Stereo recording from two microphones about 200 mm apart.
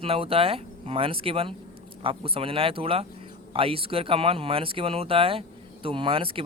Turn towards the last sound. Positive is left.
turn(degrees=-25)  # may be behind; listen again after turning